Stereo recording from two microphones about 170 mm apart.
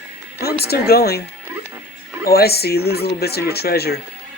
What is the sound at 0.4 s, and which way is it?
Speech, 65° left (ahead or behind).